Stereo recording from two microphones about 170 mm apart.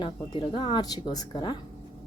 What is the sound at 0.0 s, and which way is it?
Speech, 30° left (ahead or behind).